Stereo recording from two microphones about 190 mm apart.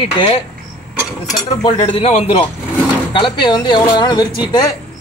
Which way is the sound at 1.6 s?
30° left (ahead or behind).